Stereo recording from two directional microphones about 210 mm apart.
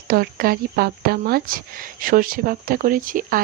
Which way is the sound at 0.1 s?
45° right (ahead or behind).